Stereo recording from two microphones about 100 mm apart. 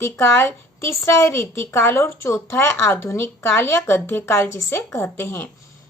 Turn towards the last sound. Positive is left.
turn(degrees=25)  # may be behind; listen again after turning